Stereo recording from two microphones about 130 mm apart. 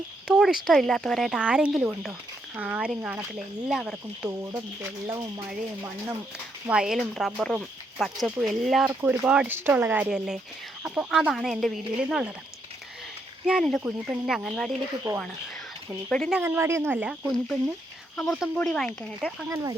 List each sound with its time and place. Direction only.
0.3 s speech: 5° right (ahead or behind)
4.3 s speech: 25° right (ahead or behind)
6.7 s speech: 5° right (ahead or behind)
13.5 s speech: centre (ahead or behind)
15.1 s speech: 15° right (ahead or behind)
16.0 s speech: 5° left (ahead or behind)
16.4 s speech: 20° right (ahead or behind)
17.2 s speech: 5° left (ahead or behind)
19.2 s speech: 5° right (ahead or behind)